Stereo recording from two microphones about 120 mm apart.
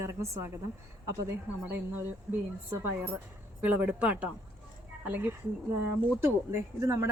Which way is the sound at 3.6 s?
15° right (ahead or behind).